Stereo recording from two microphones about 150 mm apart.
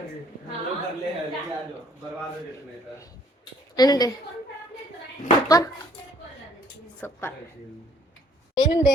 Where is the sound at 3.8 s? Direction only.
25° left (ahead or behind).